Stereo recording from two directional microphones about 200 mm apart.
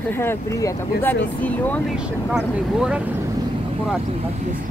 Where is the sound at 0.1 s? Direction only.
10° left (ahead or behind).